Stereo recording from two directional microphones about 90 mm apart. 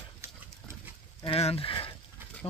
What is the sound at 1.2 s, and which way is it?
Speech, 80° left.